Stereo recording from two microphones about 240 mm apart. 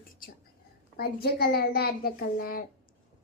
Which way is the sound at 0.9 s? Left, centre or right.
Left.